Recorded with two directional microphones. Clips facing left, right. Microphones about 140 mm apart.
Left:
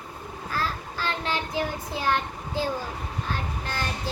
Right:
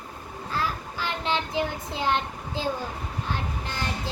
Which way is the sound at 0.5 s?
15° right (ahead or behind).